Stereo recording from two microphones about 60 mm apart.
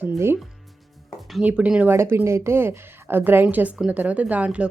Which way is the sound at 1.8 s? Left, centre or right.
Right.